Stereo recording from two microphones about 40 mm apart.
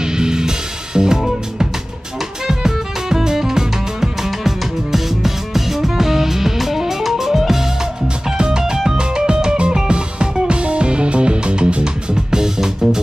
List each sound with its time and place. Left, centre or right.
0.0 s music: centre
2.4 s music: centre